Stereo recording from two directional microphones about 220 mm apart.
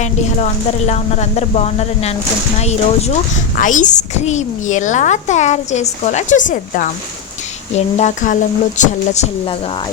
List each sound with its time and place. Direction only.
0.9 s a woman's voice: 30° left (ahead or behind)